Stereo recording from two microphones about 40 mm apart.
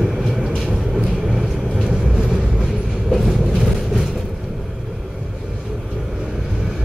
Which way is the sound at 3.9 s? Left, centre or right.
Centre.